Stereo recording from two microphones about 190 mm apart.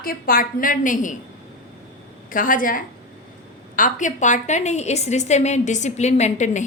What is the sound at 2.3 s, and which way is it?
A woman's voice, 45° left (ahead or behind).